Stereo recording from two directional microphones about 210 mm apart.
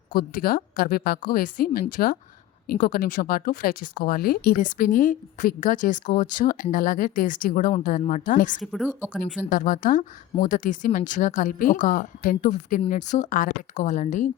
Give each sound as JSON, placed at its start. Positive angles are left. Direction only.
{"t": 0.1, "sound": "a woman's voice", "side_deg": 45}
{"t": 8.6, "sound": "a woman's voice", "side_deg": 0}
{"t": 9.5, "sound": "speech", "side_deg": 40}